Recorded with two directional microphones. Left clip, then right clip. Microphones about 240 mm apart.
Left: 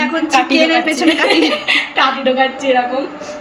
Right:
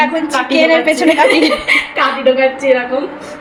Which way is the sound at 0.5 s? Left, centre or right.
Centre.